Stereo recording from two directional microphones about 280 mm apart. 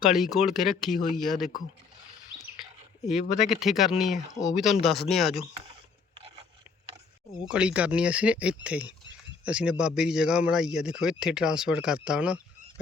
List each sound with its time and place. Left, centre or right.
0.0 s a man's voice: centre
3.4 s a man's voice: centre
7.4 s a man's voice: centre